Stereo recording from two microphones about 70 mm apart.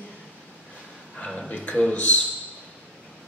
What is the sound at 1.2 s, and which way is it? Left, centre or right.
Speech, centre.